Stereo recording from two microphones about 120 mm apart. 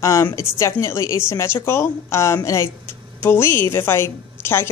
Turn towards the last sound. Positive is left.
turn(degrees=20)  # may be behind; listen again after turning